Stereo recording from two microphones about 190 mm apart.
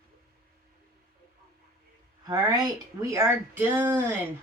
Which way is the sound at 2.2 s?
20° right (ahead or behind).